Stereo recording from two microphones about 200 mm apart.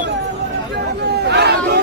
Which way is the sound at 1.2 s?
55° right (ahead or behind).